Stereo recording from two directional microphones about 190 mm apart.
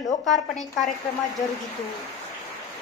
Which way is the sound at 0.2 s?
Centre (ahead or behind).